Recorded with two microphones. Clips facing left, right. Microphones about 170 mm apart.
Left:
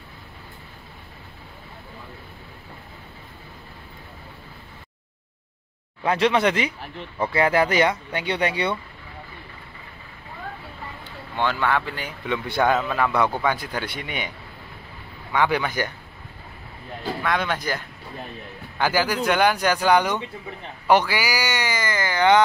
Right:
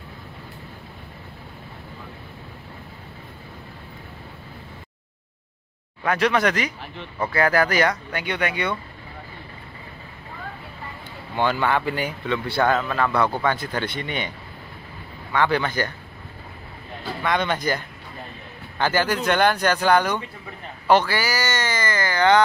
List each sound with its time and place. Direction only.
6.0 s speech: 25° left (ahead or behind)
11.3 s speech: 5° right (ahead or behind)
12.3 s speech: 15° left (ahead or behind)
15.3 s speech: 15° left (ahead or behind)
17.2 s speech: centre (ahead or behind); by 22.4 s 15° left (ahead or behind)